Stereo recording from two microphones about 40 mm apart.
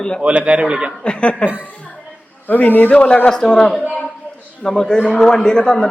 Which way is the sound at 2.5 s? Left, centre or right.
Left.